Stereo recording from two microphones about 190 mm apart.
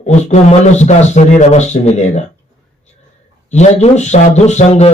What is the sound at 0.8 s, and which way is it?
Speech, 40° left (ahead or behind).